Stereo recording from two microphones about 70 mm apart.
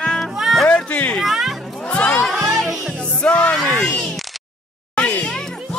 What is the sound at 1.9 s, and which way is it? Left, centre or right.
Music, centre.